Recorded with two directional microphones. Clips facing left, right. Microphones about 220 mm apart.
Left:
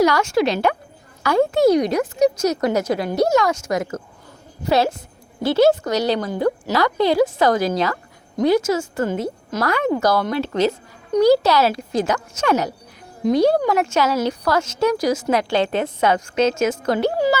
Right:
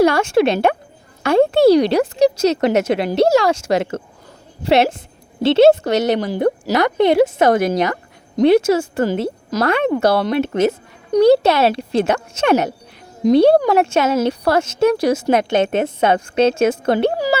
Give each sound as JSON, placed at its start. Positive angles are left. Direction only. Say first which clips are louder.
{"t": 0.0, "sound": "a woman's voice", "louder": "right 3 dB", "side_deg": -30}
{"t": 13.9, "sound": "a woman's voice", "louder": "right 3 dB", "side_deg": -25}